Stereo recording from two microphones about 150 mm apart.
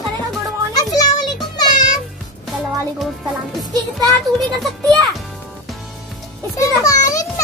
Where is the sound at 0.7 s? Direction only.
25° left (ahead or behind).